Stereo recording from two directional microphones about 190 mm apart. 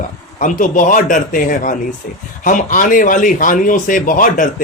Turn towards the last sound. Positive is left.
turn(degrees=45)  # may be behind; listen again after turning